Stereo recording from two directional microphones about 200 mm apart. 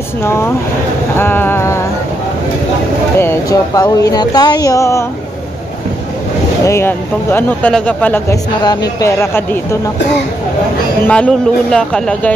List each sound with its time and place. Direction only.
0.2 s speech: 10° left (ahead or behind)
1.1 s a sound: 10° left (ahead or behind)
3.2 s speech: 15° left (ahead or behind)
6.6 s speech: 15° left (ahead or behind)
11.1 s speech: 5° left (ahead or behind)